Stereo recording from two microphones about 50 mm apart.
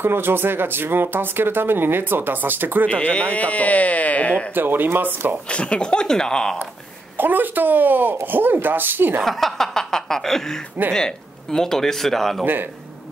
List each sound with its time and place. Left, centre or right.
0.0 s speech: right
2.9 s speech: left
4.6 s speech: right
5.5 s a man's voice: left
7.2 s speech: right
9.2 s a man's voice: centre